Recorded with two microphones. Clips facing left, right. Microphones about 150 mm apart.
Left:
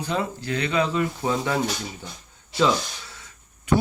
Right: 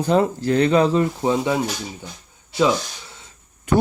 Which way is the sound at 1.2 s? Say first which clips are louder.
Right 5 dB; 20° right (ahead or behind).